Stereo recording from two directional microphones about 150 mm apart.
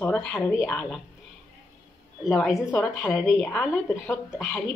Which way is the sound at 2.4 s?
5° right (ahead or behind).